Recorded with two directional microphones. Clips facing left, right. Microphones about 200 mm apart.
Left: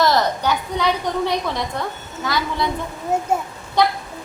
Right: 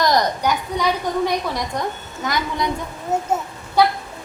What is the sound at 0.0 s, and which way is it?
A woman's voice, 15° right (ahead or behind).